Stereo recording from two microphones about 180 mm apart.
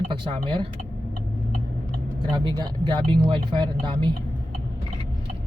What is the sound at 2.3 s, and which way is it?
Speech, 25° right (ahead or behind).